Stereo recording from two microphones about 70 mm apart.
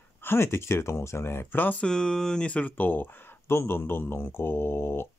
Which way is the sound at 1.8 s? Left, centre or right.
Centre.